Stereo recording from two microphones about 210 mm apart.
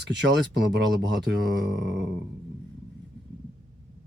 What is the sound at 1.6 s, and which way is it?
Speech, 55° right (ahead or behind).